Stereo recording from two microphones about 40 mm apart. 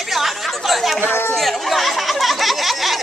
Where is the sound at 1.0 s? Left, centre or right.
Left.